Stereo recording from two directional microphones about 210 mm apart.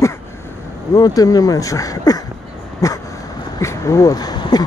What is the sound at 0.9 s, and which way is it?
Speech, 15° left (ahead or behind).